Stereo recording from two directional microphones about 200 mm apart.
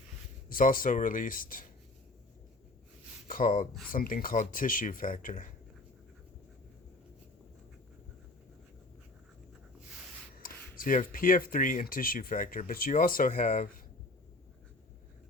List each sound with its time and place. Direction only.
0.4 s speech: 45° left (ahead or behind)
3.2 s speech: 40° left (ahead or behind)
10.4 s speech: 45° left (ahead or behind)